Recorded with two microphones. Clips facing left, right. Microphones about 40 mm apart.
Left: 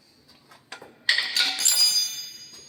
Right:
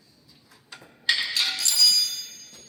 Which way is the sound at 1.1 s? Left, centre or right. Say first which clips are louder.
Left 1 dB; left.